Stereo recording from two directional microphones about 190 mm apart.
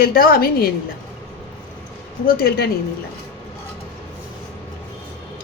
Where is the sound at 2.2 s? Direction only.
50° left (ahead or behind).